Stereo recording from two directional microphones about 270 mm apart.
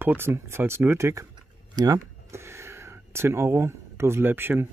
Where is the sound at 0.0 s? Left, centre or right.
Centre.